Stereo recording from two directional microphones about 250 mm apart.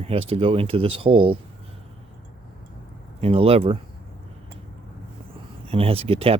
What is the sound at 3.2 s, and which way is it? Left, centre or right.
Speech, right.